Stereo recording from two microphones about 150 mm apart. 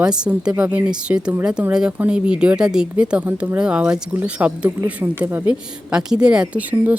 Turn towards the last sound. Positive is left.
turn(degrees=-10)  # may be behind; listen again after turning